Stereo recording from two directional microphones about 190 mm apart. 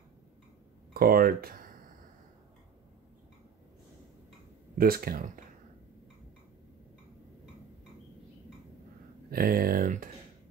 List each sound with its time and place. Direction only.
0.9 s speech: 50° right (ahead or behind)
4.7 s speech: 50° right (ahead or behind)
9.3 s speech: 50° right (ahead or behind)